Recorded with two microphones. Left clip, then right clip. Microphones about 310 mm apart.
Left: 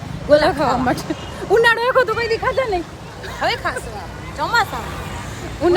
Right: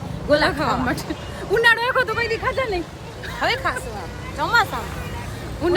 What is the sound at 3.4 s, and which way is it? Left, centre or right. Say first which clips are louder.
Speech: left 1 dB; centre.